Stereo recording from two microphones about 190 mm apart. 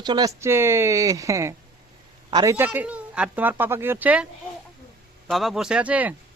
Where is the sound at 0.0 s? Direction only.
20° right (ahead or behind).